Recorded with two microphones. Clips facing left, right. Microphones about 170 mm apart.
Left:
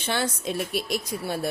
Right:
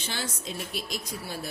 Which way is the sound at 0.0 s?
60° left (ahead or behind).